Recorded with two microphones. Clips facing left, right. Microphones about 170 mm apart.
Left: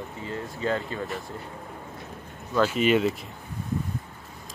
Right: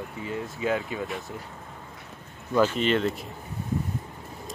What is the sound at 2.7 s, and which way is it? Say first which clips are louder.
Speech: left 2 dB; 10° left (ahead or behind).